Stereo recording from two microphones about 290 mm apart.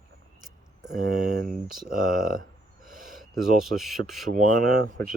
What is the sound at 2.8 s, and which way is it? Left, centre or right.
Gasp, right.